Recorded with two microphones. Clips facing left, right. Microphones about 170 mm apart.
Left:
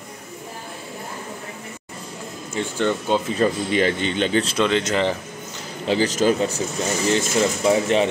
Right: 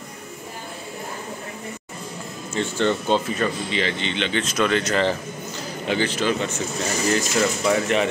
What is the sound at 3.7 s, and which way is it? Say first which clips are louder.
Speech: left 5 dB; 45° left (ahead or behind).